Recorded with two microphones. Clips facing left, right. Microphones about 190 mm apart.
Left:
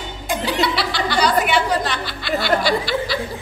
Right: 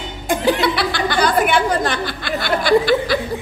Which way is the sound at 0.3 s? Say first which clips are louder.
Right 4 dB; 50° right (ahead or behind).